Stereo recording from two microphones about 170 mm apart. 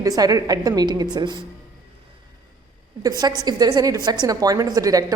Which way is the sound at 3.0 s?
20° right (ahead or behind).